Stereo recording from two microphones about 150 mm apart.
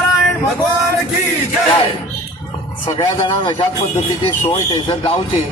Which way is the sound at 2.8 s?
35° left (ahead or behind).